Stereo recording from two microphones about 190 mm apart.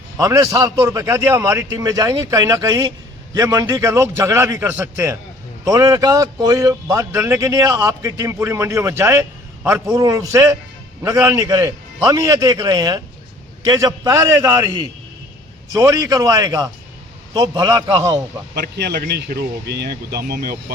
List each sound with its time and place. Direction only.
0.2 s a man's voice: 15° right (ahead or behind)
15.7 s a man's voice: 15° right (ahead or behind)
18.5 s speech: 55° right (ahead or behind)